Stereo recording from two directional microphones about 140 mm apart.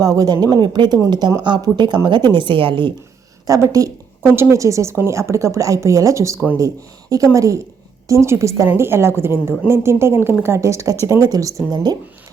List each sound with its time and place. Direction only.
0.0 s speech: 25° right (ahead or behind)
3.4 s a woman's voice: 25° right (ahead or behind)